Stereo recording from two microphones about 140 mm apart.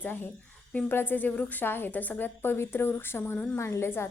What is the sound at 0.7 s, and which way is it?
A woman's voice, 10° left (ahead or behind).